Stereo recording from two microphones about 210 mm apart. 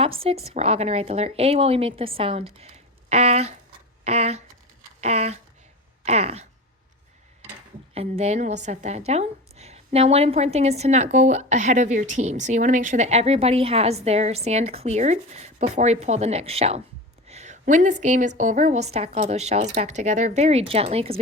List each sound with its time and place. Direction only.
0.0 s speech: 25° right (ahead or behind)
4.0 s a sound: 30° right (ahead or behind)
6.1 s a woman's voice: 30° right (ahead or behind)
7.9 s a woman's voice: 30° right (ahead or behind)
17.2 s a sound: 35° right (ahead or behind)
18.3 s a woman's voice: 35° right (ahead or behind)